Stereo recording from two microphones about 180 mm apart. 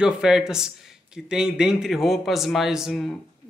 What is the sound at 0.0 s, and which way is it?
Speech, 5° right (ahead or behind).